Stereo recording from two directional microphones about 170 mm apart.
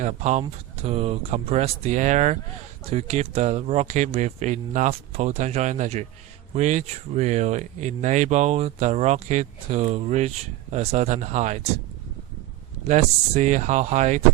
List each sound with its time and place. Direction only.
0.0 s speech: 45° right (ahead or behind)
12.9 s speech: 45° right (ahead or behind)